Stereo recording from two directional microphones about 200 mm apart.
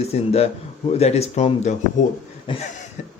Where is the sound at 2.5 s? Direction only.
25° left (ahead or behind).